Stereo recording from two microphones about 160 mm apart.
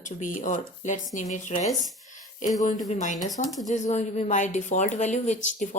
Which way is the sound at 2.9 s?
50° left (ahead or behind).